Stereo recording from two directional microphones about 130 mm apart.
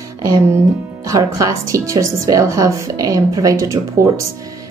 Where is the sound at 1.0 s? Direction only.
25° right (ahead or behind).